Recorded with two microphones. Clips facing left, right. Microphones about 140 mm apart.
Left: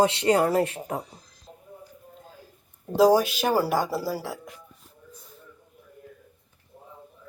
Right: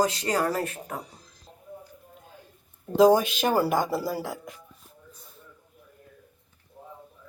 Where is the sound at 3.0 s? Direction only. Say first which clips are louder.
Even; 5° left (ahead or behind).